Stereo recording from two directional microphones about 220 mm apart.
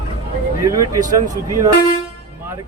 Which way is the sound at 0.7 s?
15° right (ahead or behind).